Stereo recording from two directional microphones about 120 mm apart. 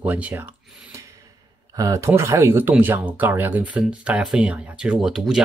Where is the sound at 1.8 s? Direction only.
25° right (ahead or behind).